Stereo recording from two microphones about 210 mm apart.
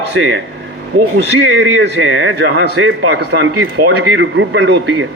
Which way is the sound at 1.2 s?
60° right (ahead or behind).